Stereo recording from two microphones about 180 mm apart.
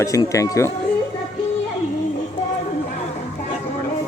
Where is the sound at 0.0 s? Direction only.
15° left (ahead or behind).